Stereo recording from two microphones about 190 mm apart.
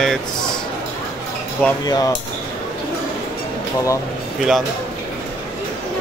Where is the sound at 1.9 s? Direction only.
20° left (ahead or behind).